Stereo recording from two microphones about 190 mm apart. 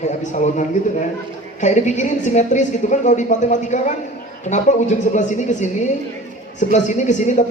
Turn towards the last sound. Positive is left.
turn(degrees=40)  # may be behind; listen again after turning